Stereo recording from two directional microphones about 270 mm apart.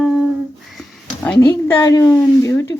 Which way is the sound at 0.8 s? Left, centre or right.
Centre.